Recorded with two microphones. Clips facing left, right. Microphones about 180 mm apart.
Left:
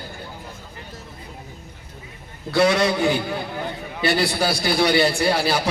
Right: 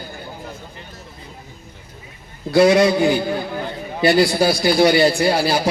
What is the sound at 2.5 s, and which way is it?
Speech, 35° right (ahead or behind).